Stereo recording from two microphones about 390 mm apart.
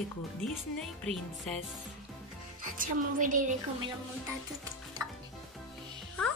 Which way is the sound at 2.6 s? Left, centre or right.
Right.